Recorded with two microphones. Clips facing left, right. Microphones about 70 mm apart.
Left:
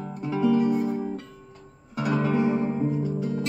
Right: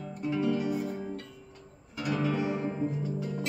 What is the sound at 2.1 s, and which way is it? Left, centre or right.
Music, left.